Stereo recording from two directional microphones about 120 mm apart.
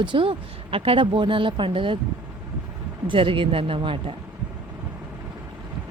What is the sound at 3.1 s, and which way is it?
Speech, 45° right (ahead or behind).